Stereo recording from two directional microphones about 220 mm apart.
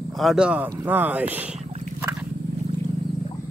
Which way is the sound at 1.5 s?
30° right (ahead or behind).